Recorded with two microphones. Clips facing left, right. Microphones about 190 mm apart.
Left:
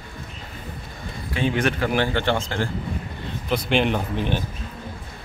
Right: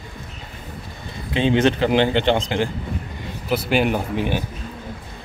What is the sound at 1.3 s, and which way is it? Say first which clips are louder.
A man's voice: right 5 dB; 25° right (ahead or behind).